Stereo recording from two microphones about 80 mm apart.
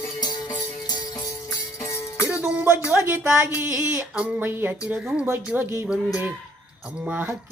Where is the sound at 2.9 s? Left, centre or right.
Right.